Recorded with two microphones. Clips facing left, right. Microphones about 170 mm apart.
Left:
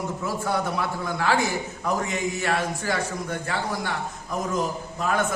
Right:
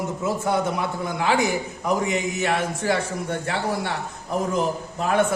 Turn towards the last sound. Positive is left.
turn(degrees=-30)  # may be behind; listen again after turning